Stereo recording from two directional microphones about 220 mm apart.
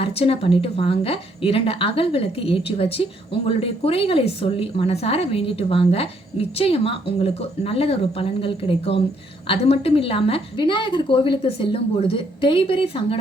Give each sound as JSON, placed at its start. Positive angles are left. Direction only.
{"t": 0.0, "sound": "a woman's voice", "side_deg": 25}